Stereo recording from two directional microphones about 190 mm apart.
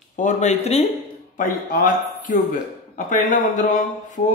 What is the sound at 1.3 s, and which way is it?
A man's voice, 45° left (ahead or behind).